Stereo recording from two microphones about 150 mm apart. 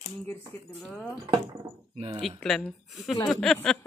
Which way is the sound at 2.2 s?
5° left (ahead or behind).